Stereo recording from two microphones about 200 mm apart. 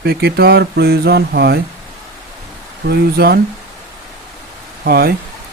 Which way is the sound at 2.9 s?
50° right (ahead or behind).